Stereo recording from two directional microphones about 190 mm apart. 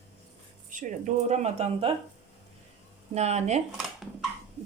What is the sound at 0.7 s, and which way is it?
Speech, 40° right (ahead or behind).